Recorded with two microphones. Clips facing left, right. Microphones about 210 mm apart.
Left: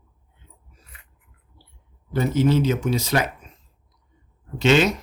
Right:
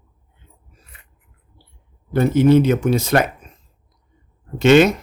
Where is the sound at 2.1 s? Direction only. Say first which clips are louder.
Right 6 dB; 55° right (ahead or behind).